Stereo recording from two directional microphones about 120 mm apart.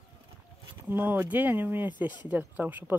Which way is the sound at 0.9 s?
15° right (ahead or behind).